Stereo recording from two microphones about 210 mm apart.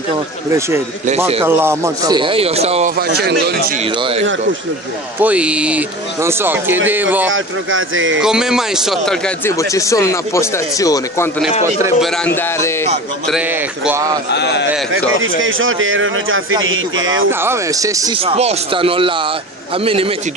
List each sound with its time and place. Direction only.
0.5 s speech: 15° right (ahead or behind)
1.0 s speech: 30° right (ahead or behind)
1.4 s speech: 10° right (ahead or behind); by 2.9 s 30° right (ahead or behind)
3.0 s speech: 50° right (ahead or behind)
4.0 s speech: 25° right (ahead or behind)
5.2 s speech: 5° right (ahead or behind)
7.3 s a man's voice: 70° right (ahead or behind)
8.2 s a man's voice: 5° right (ahead or behind)
9.5 s speech: 15° left (ahead or behind)
12.3 s speech: 15° left (ahead or behind)
14.3 s a man's voice: 55° left (ahead or behind)
14.9 s a man's voice: 70° right (ahead or behind)
17.3 s speech: 10° right (ahead or behind); by 20.1 s 25° right (ahead or behind)